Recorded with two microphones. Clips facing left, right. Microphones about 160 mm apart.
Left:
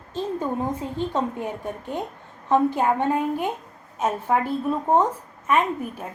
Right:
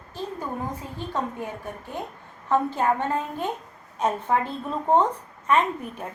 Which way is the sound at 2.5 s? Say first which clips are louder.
Left 3 dB; 15° left (ahead or behind).